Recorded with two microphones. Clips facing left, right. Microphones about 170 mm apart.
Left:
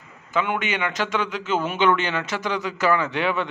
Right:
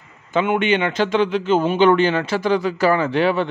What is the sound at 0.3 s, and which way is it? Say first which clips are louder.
A man's voice: right 7 dB; 25° right (ahead or behind).